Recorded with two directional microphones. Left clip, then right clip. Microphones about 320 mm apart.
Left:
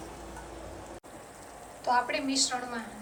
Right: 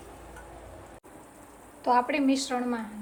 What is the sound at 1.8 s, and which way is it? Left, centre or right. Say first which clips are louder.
Speech: right 4 dB; centre.